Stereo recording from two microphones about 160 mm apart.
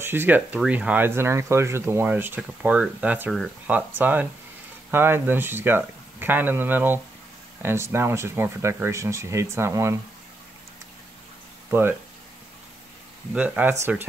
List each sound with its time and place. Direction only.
0.0 s speech: 15° right (ahead or behind)
11.7 s speech: 15° right (ahead or behind)
13.3 s speech: 10° right (ahead or behind)